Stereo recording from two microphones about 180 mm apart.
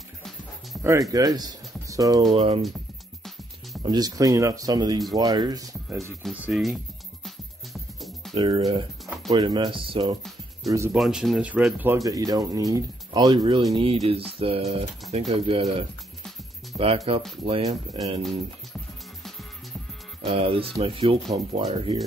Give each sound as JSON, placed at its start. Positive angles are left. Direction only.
{"t": 0.7, "sound": "music", "side_deg": 0}
{"t": 1.1, "sound": "speech", "side_deg": -20}
{"t": 2.3, "sound": "speech", "side_deg": -30}
{"t": 3.8, "sound": "speech", "side_deg": -20}
{"t": 6.2, "sound": "speech", "side_deg": -5}
{"t": 7.2, "sound": "music", "side_deg": 0}
{"t": 8.4, "sound": "speech", "side_deg": -30}
{"t": 9.0, "sound": "music", "side_deg": 0}
{"t": 9.3, "sound": "speech", "side_deg": -20}
{"t": 10.7, "sound": "speech", "side_deg": -15}
{"t": 11.0, "sound": "speech", "side_deg": 0}
{"t": 20.2, "sound": "speech", "side_deg": -30}